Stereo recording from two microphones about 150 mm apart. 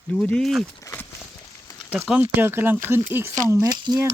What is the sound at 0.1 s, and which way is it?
Speech, 5° left (ahead or behind).